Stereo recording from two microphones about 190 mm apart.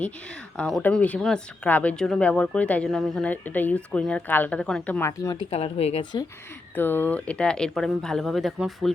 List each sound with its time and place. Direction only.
0.0 s speech: 5° left (ahead or behind)
5.5 s speech: 35° left (ahead or behind)
6.7 s speech: 10° left (ahead or behind)